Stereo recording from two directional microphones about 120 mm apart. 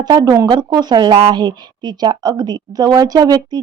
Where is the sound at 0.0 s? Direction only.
35° right (ahead or behind).